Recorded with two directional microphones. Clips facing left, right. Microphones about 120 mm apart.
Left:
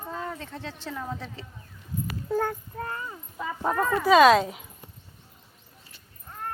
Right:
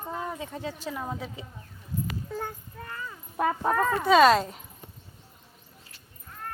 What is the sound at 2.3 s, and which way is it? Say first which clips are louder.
Speech: left 8 dB; 60° left (ahead or behind).